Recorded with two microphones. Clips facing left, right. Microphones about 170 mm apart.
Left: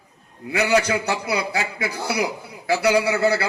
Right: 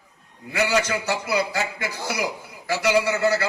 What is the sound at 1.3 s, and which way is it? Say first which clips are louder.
Speech: right 2 dB; 65° left (ahead or behind).